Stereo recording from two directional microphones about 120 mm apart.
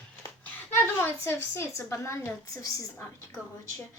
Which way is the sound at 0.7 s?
20° left (ahead or behind).